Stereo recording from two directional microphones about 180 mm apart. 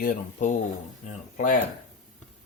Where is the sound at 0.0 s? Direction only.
50° left (ahead or behind).